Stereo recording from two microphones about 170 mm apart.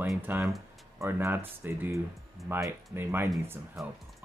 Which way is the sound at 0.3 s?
10° right (ahead or behind).